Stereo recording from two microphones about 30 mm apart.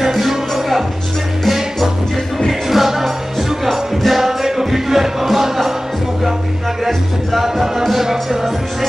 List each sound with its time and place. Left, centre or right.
0.0 s music: centre
2.7 s music: centre
7.3 s music: centre